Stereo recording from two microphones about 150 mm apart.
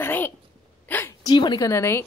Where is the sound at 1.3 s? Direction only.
30° left (ahead or behind).